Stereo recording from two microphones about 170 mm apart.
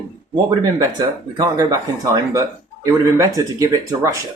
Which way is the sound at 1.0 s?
20° right (ahead or behind).